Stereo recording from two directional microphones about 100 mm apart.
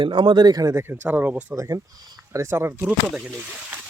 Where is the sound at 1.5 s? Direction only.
35° right (ahead or behind).